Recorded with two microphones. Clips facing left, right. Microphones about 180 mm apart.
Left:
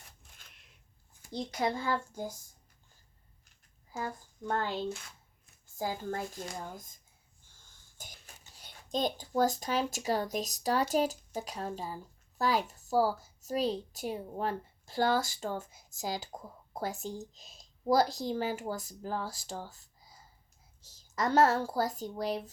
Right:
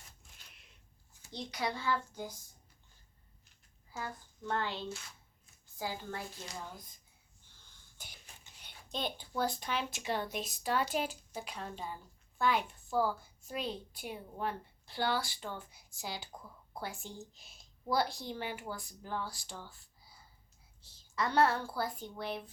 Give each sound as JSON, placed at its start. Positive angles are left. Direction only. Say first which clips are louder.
{"t": 0.5, "sound": "a sound", "louder": "even", "side_deg": 0}
{"t": 1.2, "sound": "a woman's voice", "louder": "left 5 dB", "side_deg": 50}
{"t": 3.9, "sound": "a woman's voice", "louder": "left 5 dB", "side_deg": 40}
{"t": 20.0, "sound": "whispering", "louder": "left 3 dB", "side_deg": 45}
{"t": 20.8, "sound": "a woman's voice", "louder": "left 4 dB", "side_deg": 45}